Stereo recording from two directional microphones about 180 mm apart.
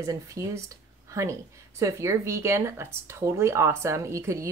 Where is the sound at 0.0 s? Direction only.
15° right (ahead or behind).